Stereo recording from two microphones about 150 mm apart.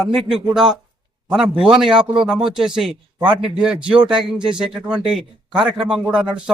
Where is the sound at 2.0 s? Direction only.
35° right (ahead or behind).